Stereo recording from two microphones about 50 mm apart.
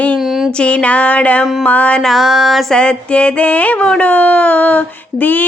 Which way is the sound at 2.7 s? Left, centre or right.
Left.